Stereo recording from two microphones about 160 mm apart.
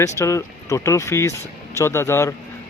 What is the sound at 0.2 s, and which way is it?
Speech, 20° left (ahead or behind).